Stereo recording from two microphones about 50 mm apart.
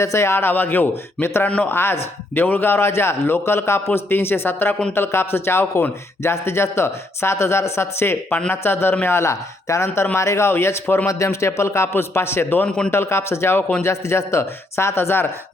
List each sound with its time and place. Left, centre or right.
0.0 s a man's voice: left
9.0 s a man's voice: left
11.1 s a man's voice: left
12.6 s a man's voice: centre
12.9 s speech: left